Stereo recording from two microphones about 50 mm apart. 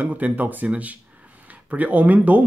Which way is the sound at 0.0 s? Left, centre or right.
Right.